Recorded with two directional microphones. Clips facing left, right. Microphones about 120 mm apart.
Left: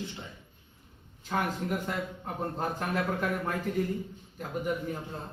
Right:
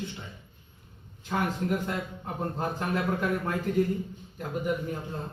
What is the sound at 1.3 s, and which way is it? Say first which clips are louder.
Speech: right 1 dB; centre (ahead or behind).